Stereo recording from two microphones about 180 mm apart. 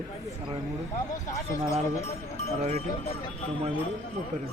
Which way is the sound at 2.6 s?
35° right (ahead or behind).